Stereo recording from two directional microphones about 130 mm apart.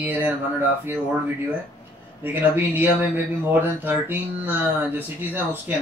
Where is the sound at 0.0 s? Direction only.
15° right (ahead or behind).